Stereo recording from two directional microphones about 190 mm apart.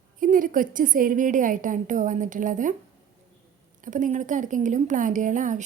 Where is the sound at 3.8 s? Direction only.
40° right (ahead or behind).